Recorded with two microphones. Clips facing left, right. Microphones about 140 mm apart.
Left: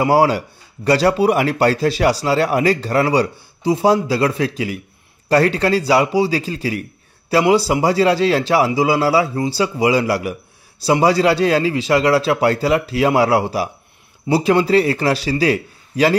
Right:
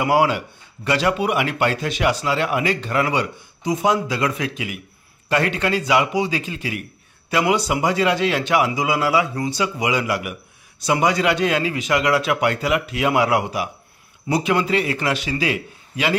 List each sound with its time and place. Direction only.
0.0 s speech: 35° left (ahead or behind)